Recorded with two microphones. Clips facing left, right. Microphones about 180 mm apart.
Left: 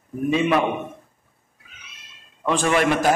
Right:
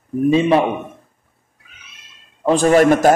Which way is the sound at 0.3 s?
30° right (ahead or behind).